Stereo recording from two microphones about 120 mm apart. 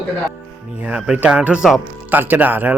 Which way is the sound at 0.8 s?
10° right (ahead or behind).